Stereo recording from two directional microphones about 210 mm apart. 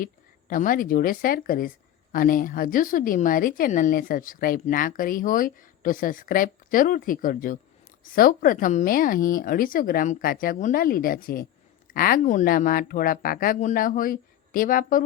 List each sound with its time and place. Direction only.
0.0 s a woman's voice: 40° left (ahead or behind)